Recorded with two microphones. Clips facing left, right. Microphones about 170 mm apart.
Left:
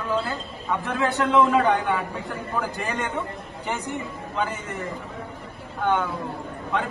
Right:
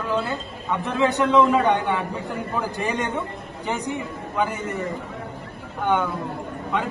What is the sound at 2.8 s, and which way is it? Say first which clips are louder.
Speech: right 3 dB; 15° right (ahead or behind).